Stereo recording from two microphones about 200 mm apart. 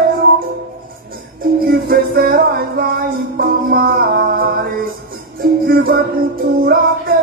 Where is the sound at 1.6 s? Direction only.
50° right (ahead or behind).